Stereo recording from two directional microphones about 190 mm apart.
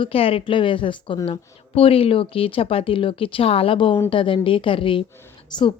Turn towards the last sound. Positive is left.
turn(degrees=10)  # may be behind; listen again after turning